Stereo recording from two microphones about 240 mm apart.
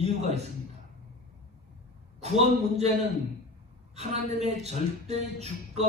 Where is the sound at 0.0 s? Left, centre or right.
Right.